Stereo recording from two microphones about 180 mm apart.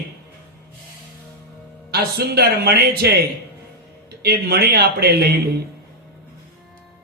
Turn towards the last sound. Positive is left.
turn(degrees=-60)  # may be behind; listen again after turning